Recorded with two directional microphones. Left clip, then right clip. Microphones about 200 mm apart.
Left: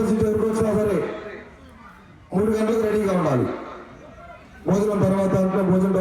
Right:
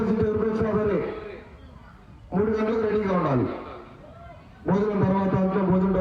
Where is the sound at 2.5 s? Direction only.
35° left (ahead or behind).